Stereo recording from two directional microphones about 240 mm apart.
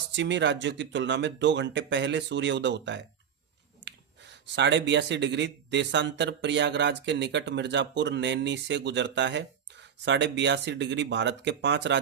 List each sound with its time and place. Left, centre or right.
0.2 s speech: right